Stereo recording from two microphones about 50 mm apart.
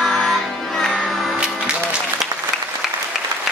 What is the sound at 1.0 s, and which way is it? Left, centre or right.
Music, centre.